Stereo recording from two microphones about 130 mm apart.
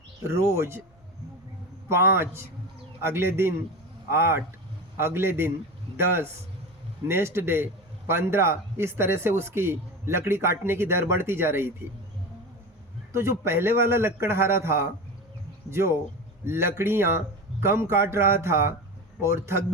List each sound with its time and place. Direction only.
0.3 s a man's voice: 20° right (ahead or behind)
1.9 s a man's voice: 20° right (ahead or behind)
13.1 s a man's voice: 20° right (ahead or behind)